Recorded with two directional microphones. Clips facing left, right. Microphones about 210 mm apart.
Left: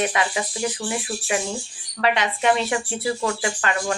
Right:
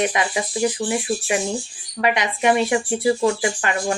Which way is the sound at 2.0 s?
15° right (ahead or behind).